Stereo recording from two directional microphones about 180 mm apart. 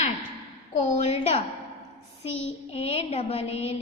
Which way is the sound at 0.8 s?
35° left (ahead or behind).